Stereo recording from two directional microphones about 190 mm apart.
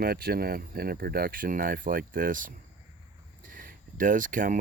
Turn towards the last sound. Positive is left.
turn(degrees=-45)  # may be behind; listen again after turning